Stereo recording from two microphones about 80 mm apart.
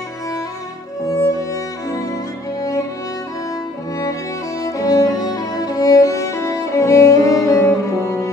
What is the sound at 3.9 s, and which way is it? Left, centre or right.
Music, left.